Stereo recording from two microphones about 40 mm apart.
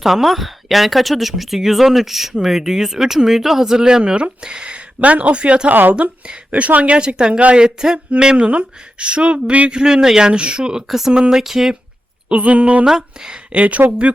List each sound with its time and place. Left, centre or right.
0.0 s speech: centre; by 4.8 s right
4.9 s speech: right
6.9 s speech: right
9.7 s speech: centre
10.8 s speech: centre
11.1 s speech: centre
12.3 s speech: right
12.8 s speech: centre
13.6 s speech: right